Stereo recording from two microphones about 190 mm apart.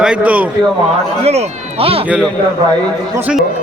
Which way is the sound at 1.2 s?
35° right (ahead or behind).